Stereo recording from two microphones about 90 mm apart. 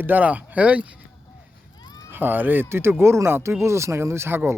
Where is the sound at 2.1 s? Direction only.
20° right (ahead or behind).